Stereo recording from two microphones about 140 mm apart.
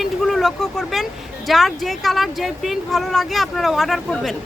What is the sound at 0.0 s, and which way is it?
Speech, centre (ahead or behind).